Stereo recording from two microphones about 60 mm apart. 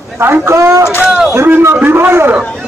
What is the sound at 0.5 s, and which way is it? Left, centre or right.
Speech, right.